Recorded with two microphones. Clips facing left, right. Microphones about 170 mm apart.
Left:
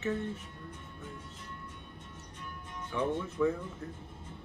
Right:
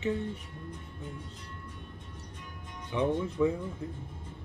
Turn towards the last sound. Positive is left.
turn(degrees=-15)  # may be behind; listen again after turning